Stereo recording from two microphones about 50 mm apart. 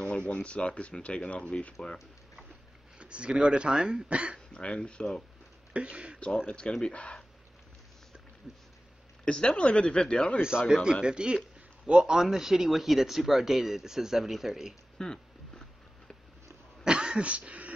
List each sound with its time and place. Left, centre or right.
0.3 s speech: left
3.0 s speech: right
4.6 s speech: left
5.7 s speech: right
6.1 s speech: left
8.5 s speech: centre
9.2 s speech: centre
10.7 s speech: centre
15.0 s a sound: centre
16.8 s a sound: centre